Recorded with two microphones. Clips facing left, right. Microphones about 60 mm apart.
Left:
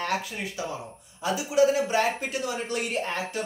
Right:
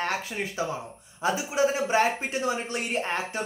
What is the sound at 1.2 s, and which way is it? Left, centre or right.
A man's voice, right.